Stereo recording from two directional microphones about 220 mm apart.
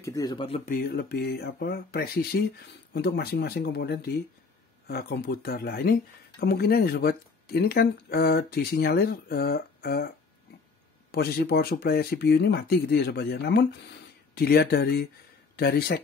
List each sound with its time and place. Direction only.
0.0 s speech: 15° left (ahead or behind)
0.7 s speech: 45° left (ahead or behind)